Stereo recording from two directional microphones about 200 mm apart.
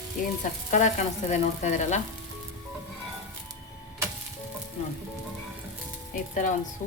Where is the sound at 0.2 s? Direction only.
45° left (ahead or behind).